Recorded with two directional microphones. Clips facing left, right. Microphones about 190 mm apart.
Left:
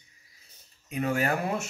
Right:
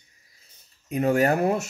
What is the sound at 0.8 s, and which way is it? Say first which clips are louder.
Speech: right 7 dB; 40° right (ahead or behind).